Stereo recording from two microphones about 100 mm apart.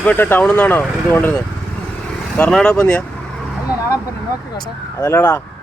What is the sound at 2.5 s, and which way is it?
Speech, 5° left (ahead or behind).